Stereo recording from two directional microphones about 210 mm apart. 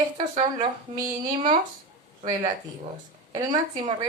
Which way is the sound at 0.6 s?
20° right (ahead or behind).